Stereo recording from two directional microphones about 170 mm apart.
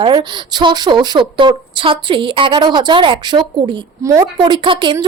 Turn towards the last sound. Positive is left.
turn(degrees=-30)  # may be behind; listen again after turning